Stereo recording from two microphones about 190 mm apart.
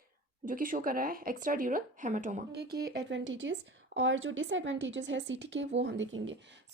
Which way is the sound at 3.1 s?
80° right.